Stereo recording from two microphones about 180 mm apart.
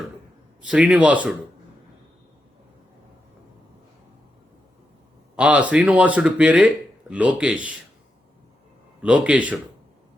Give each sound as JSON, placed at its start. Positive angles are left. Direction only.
{"t": 0.7, "sound": "speech", "side_deg": -5}
{"t": 5.4, "sound": "speech", "side_deg": -5}
{"t": 9.0, "sound": "speech", "side_deg": -5}